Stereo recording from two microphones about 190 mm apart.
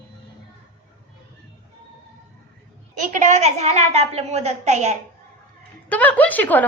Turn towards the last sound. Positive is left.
turn(degrees=10)  # may be behind; listen again after turning